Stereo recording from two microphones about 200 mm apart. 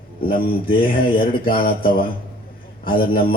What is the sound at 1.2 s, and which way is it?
A man's voice, 45° left (ahead or behind).